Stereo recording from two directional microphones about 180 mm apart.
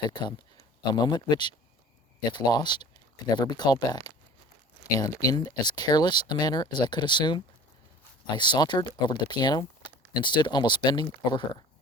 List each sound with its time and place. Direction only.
0.1 s speech: 25° left (ahead or behind)